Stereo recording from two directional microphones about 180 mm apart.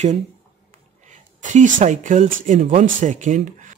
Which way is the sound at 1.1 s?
45° right (ahead or behind).